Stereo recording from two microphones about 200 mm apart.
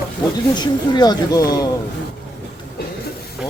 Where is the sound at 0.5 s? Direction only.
20° left (ahead or behind).